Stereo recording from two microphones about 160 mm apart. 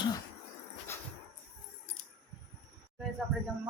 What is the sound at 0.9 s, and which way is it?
Dog, 15° left (ahead or behind).